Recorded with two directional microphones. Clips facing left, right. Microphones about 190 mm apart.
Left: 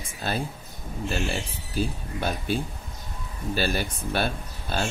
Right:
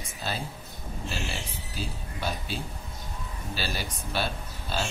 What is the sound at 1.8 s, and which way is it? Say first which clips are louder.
Speech: left 8 dB; 55° left (ahead or behind).